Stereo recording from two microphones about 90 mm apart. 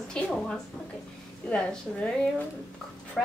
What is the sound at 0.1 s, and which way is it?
A woman's voice, 10° left (ahead or behind).